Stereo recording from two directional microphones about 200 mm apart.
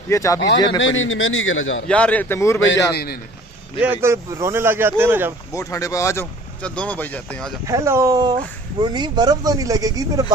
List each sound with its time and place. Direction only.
0.1 s speech: 15° left (ahead or behind)
0.7 s a man's voice: 75° left (ahead or behind)
1.9 s speech: 5° left (ahead or behind)
2.6 s speech: 60° left (ahead or behind)
3.8 s speech: 10° right (ahead or behind)
5.5 s speech: 15° left (ahead or behind)
7.6 s speech: 15° right (ahead or behind)